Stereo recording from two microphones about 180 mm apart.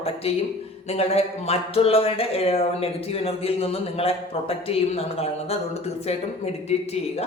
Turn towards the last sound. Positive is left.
turn(degrees=35)  # may be behind; listen again after turning